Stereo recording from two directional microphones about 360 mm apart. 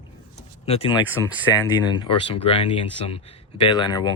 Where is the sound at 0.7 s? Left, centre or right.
Centre.